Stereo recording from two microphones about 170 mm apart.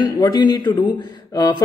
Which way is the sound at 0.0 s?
25° left (ahead or behind).